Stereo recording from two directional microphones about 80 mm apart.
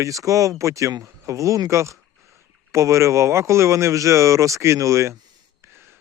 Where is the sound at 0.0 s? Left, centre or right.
Right.